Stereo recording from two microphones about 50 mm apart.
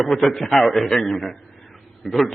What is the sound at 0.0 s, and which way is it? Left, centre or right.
A man's voice, centre.